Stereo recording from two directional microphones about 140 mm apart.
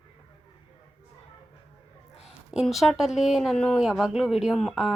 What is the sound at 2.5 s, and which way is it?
Speech, centre (ahead or behind).